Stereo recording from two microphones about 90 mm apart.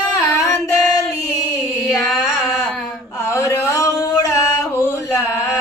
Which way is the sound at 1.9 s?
Centre (ahead or behind).